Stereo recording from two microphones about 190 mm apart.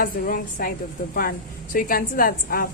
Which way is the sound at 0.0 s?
50° left (ahead or behind).